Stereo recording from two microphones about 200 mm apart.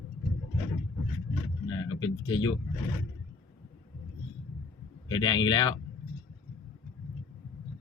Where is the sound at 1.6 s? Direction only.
20° left (ahead or behind).